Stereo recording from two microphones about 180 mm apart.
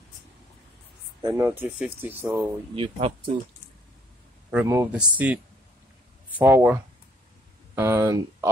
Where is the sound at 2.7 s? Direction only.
30° right (ahead or behind).